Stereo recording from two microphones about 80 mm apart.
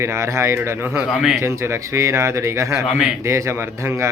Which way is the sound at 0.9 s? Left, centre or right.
Centre.